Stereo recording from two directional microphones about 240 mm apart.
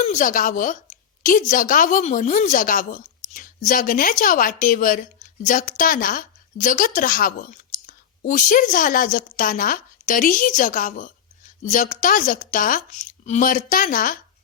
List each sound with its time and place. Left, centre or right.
0.1 s a woman's voice: left